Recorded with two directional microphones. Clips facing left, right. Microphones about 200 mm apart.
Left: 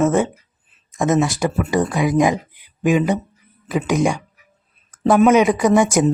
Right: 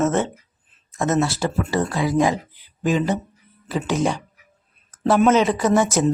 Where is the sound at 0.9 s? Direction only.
15° left (ahead or behind).